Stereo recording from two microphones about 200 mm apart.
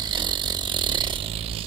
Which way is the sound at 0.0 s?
20° right (ahead or behind).